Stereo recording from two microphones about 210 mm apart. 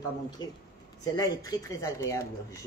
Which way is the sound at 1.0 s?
15° left (ahead or behind).